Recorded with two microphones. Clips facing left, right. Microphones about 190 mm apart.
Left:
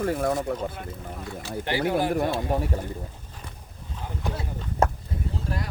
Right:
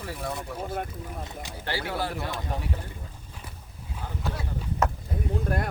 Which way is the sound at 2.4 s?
45° left (ahead or behind).